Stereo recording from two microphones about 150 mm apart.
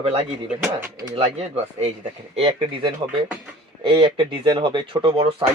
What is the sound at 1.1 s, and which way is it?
Speech, 45° right (ahead or behind).